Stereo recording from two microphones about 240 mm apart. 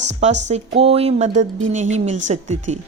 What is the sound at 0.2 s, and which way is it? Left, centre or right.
A woman's voice, right.